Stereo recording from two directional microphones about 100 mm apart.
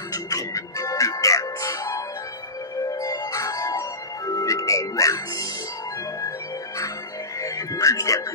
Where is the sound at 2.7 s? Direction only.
35° left (ahead or behind).